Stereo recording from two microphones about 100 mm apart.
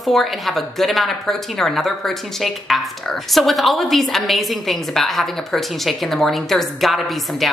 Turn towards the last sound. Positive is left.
turn(degrees=0)  # may be behind; listen again after turning